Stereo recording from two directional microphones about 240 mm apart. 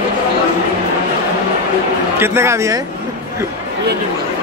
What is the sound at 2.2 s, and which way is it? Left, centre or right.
Speech, centre.